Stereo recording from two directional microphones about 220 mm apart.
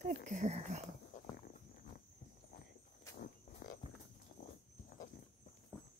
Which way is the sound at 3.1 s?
40° left (ahead or behind).